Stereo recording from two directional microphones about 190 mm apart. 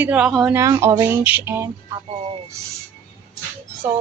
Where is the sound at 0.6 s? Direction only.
15° right (ahead or behind).